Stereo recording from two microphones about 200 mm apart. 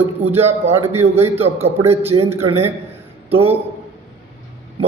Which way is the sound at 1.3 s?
30° right (ahead or behind).